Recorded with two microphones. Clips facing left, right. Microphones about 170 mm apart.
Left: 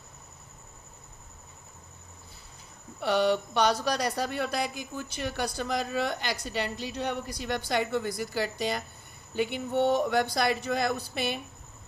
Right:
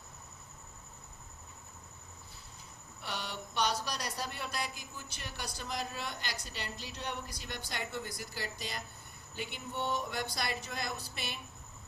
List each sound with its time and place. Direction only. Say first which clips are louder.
3.0 s speech: left 17 dB; 70° left (ahead or behind)